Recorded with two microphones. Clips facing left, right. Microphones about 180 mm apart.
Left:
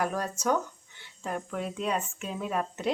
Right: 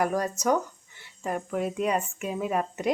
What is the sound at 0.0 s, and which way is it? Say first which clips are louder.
Speech: right 4 dB; 10° right (ahead or behind).